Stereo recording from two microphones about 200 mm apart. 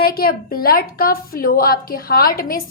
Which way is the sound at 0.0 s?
50° left (ahead or behind).